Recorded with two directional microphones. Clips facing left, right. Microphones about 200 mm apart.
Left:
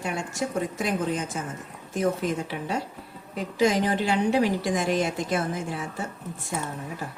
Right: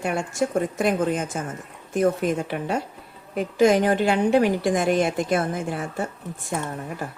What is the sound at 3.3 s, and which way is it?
A woman's voice, 55° right (ahead or behind).